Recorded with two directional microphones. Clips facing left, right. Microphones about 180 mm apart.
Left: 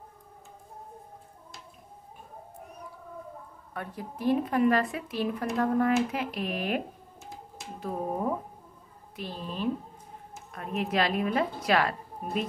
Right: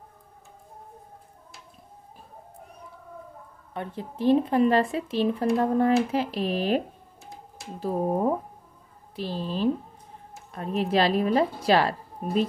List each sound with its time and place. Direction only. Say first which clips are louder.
3.7 s speech: right 4 dB; 25° right (ahead or behind)
7.8 s a woman's voice: right 6 dB; 35° right (ahead or behind)